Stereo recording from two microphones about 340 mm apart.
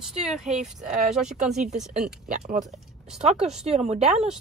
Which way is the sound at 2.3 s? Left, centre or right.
Right.